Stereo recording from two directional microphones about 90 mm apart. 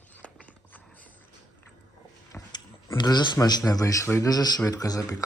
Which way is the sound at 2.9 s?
55° left (ahead or behind).